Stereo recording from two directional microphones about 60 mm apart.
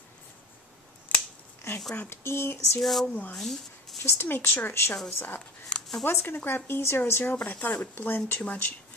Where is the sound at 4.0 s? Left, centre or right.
Left.